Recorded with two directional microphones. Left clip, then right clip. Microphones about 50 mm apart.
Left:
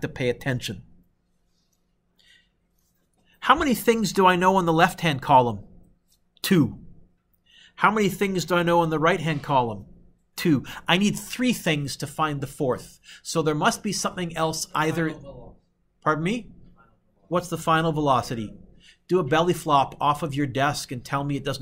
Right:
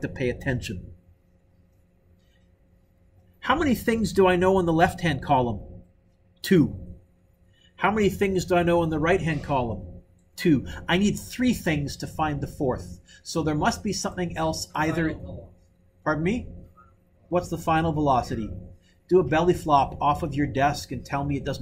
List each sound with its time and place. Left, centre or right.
0.1 s speech: left
3.3 s speech: left
7.7 s a man's voice: left